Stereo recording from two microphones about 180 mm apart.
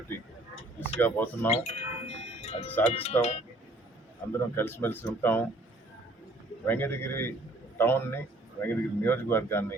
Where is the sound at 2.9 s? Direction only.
35° left (ahead or behind).